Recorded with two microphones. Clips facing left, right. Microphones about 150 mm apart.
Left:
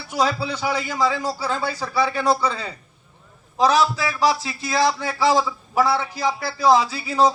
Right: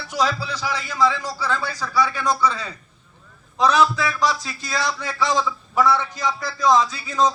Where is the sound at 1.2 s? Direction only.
30° left (ahead or behind).